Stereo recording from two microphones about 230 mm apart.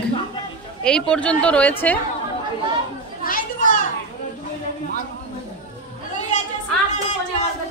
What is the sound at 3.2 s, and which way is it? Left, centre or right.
Children playing, left.